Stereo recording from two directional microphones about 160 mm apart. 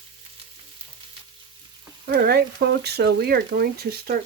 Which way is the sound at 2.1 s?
75° right (ahead or behind).